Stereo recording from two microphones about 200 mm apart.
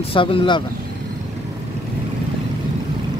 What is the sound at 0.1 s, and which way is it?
Speech, 25° left (ahead or behind).